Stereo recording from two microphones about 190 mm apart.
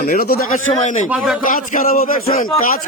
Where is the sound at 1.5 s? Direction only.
45° left (ahead or behind).